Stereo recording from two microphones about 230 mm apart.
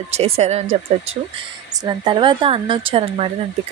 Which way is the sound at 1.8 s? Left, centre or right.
Right.